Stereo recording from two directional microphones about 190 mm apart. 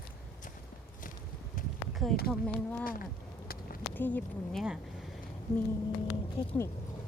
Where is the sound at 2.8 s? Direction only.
50° left (ahead or behind).